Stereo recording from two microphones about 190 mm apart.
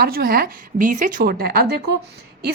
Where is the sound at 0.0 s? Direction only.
50° right (ahead or behind).